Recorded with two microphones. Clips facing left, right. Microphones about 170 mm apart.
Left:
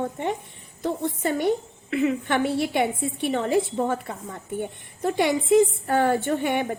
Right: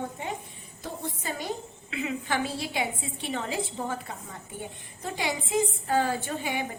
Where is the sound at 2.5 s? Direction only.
60° left (ahead or behind).